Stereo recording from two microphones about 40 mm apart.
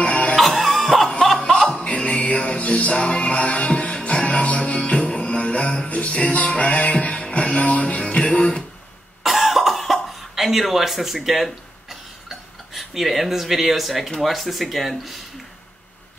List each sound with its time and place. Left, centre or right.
0.0 s music: left
0.4 s cough: centre
2.0 s music: left
9.2 s cough: centre
10.3 s a sound: centre
12.7 s speech: centre